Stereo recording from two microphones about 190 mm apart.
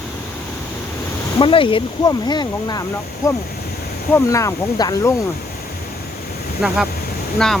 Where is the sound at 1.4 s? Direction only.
25° left (ahead or behind).